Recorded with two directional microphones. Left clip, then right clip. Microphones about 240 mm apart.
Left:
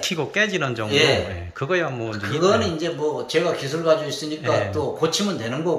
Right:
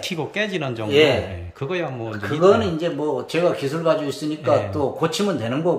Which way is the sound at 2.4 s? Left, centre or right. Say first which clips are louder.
Right 3 dB; right.